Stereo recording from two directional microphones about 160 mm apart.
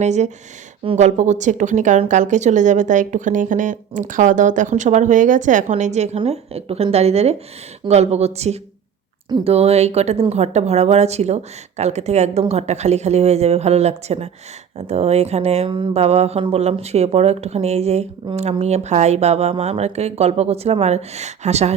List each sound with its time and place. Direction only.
0.0 s speech: 45° right (ahead or behind)